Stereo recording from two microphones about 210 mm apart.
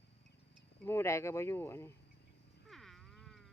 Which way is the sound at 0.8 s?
10° left (ahead or behind).